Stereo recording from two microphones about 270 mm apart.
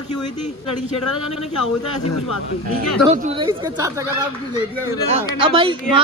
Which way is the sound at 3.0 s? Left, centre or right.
Right.